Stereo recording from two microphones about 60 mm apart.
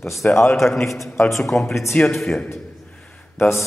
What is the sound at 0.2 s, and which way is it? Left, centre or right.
Speech, left.